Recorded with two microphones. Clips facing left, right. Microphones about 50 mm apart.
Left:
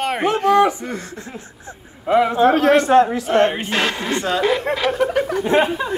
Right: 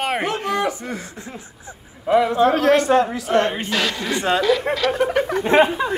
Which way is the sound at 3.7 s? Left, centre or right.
Left.